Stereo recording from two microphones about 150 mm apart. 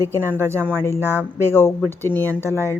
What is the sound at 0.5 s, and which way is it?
Speech, 10° left (ahead or behind).